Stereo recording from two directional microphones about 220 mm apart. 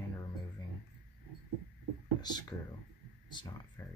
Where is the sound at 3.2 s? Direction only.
20° left (ahead or behind).